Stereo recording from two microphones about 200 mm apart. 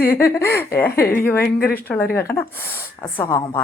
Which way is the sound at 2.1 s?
10° left (ahead or behind).